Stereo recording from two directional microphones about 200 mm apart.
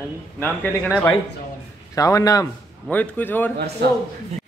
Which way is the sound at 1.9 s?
15° left (ahead or behind).